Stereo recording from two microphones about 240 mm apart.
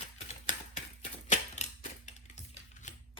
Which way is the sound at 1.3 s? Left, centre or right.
Left.